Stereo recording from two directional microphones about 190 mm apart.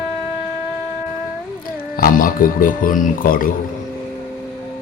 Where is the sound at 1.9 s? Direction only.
50° left (ahead or behind).